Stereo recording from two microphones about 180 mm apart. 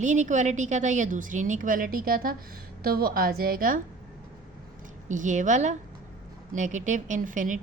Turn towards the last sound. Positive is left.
turn(degrees=-45)  # may be behind; listen again after turning